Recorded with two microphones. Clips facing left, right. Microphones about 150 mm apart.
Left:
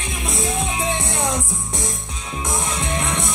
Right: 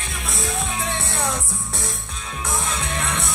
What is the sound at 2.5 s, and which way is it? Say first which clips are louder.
Music: left 2 dB; 20° left (ahead or behind).